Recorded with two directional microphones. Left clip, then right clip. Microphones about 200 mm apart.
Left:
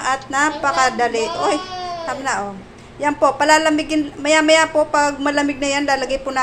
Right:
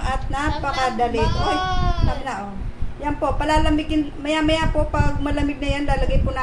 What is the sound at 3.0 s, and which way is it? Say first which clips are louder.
A woman's voice: left 7 dB; 5° left (ahead or behind).